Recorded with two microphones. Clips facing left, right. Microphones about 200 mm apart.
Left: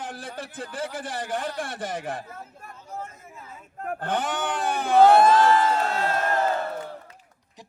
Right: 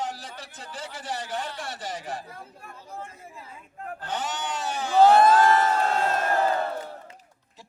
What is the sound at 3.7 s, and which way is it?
Speech, 55° left (ahead or behind).